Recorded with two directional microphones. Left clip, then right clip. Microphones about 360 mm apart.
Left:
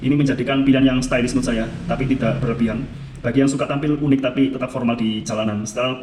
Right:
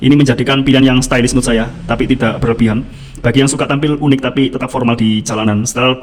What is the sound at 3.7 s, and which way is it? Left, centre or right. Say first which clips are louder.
Speech: right 6 dB; right.